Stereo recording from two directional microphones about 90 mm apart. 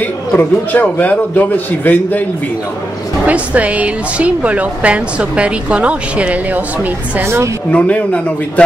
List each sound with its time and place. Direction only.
0.4 s speech: 20° left (ahead or behind)
3.3 s a woman's voice: 15° right (ahead or behind)
7.7 s a man's voice: 15° left (ahead or behind)